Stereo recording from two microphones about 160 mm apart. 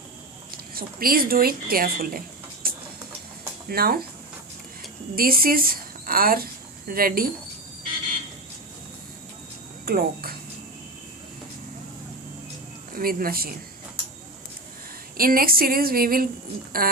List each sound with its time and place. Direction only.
0.7 s speech: 65° right (ahead or behind)
2.6 s a sound: 65° right (ahead or behind)
3.7 s speech: 70° right (ahead or behind)
5.1 s speech: 65° right (ahead or behind)
9.8 s speech: 70° right (ahead or behind)
12.9 s a man's voice: 65° right (ahead or behind)
15.2 s a woman's voice: 65° right (ahead or behind)